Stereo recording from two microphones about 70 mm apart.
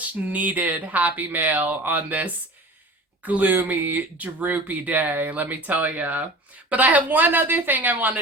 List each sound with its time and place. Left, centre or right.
0.0 s speech: right